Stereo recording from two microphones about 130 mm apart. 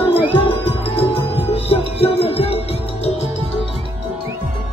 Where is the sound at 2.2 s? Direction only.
50° left (ahead or behind).